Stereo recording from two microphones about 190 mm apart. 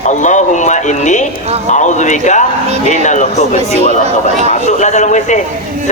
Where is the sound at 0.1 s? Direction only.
40° left (ahead or behind).